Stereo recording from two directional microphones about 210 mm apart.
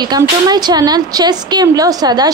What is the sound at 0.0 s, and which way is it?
A woman's voice, 20° right (ahead or behind).